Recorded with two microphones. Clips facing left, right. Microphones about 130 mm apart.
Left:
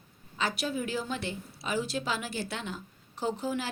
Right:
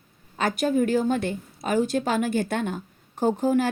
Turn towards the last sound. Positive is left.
turn(degrees=-50)  # may be behind; listen again after turning